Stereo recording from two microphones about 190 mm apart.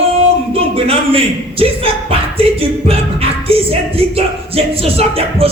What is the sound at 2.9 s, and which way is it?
Music, 30° right (ahead or behind).